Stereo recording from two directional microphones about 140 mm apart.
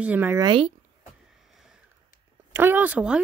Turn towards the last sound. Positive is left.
turn(degrees=-10)  # may be behind; listen again after turning